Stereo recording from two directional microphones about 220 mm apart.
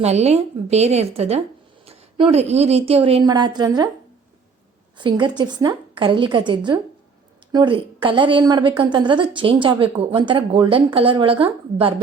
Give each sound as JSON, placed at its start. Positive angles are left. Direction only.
{"t": 0.0, "sound": "a woman's voice", "side_deg": -30}
{"t": 4.9, "sound": "a woman's voice", "side_deg": -20}